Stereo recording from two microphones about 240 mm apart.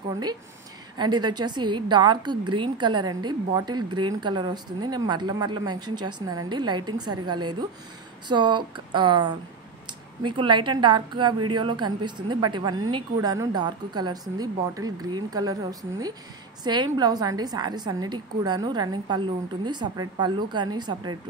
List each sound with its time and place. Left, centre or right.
0.9 s a woman's voice: centre
5.9 s a woman's voice: right
6.2 s a woman's voice: centre
8.3 s a woman's voice: centre